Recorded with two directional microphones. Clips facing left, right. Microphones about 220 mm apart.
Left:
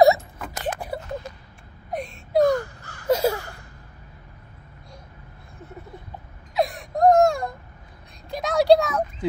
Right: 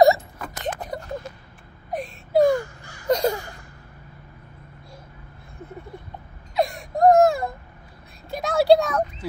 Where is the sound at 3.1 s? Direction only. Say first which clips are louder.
Even; 5° left (ahead or behind).